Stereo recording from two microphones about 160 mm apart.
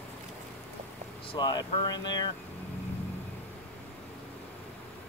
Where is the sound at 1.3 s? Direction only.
25° left (ahead or behind).